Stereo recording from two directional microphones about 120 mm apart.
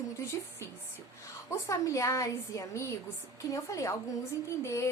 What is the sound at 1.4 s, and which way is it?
A woman's voice, 25° left (ahead or behind).